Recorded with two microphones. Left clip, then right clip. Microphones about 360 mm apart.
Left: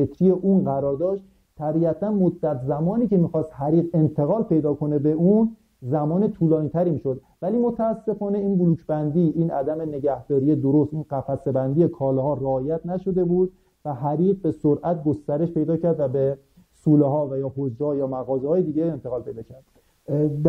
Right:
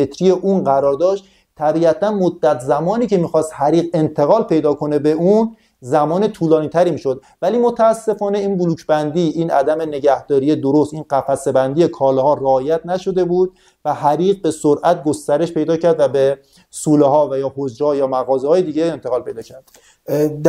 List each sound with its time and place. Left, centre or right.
0.0 s speech: centre
10.6 s speech: right
11.9 s speech: centre
18.5 s speech: centre